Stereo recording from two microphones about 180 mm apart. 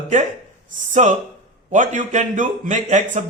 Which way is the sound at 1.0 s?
40° right (ahead or behind).